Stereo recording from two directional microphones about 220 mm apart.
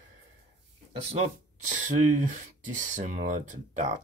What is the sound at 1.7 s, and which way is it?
Speech, 35° right (ahead or behind).